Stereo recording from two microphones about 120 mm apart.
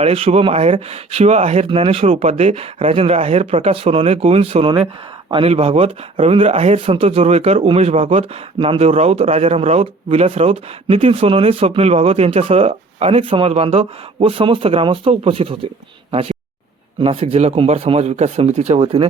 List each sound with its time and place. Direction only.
0.0 s speech: 50° right (ahead or behind)
8.8 s speech: 60° right (ahead or behind)
17.0 s speech: 50° right (ahead or behind)